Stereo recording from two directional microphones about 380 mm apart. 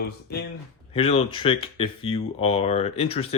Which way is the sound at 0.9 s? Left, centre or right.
Centre.